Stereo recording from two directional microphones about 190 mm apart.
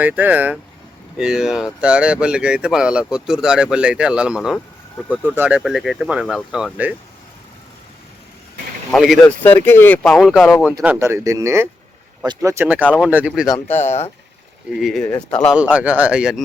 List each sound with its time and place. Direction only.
0.0 s speech: 10° right (ahead or behind)
4.9 s speech: 10° left (ahead or behind)
5.2 s speech: 10° right (ahead or behind)
8.9 s speech: centre (ahead or behind)
10.8 s speech: 15° right (ahead or behind)
13.7 s speech: 35° left (ahead or behind)
14.8 s speech: centre (ahead or behind)
15.5 s speech: 5° right (ahead or behind)